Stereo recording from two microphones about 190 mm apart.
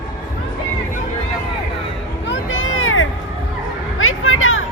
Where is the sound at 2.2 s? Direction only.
80° left.